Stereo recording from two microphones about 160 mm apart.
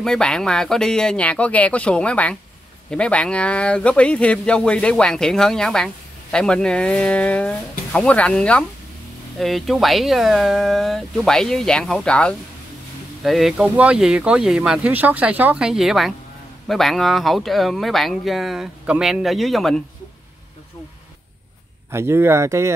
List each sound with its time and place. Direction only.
0.0 s speech: 5° left (ahead or behind)
21.9 s speech: 15° right (ahead or behind)